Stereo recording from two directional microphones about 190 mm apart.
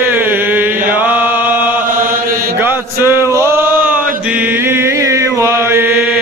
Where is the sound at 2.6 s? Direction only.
10° right (ahead or behind).